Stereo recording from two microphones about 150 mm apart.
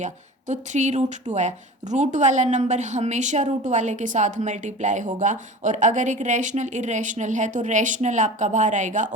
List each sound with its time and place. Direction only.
0.0 s speech: 55° right (ahead or behind)